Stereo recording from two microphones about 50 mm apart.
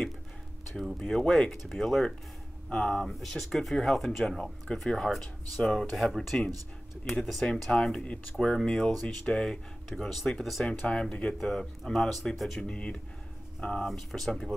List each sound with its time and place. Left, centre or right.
0.9 s speech: centre
3.1 s speech: centre
10.9 s speech: centre
11.4 s speech: centre
12.6 s speech: centre
13.8 s speech: centre